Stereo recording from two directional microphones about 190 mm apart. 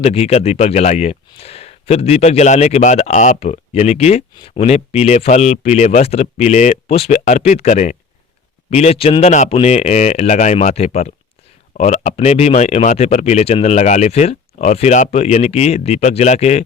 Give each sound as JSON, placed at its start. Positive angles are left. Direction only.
{"t": 0.0, "sound": "a man's voice", "side_deg": 30}